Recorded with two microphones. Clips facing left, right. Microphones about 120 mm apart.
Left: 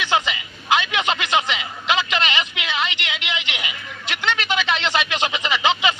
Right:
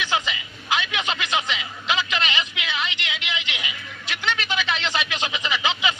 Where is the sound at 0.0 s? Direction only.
70° left (ahead or behind).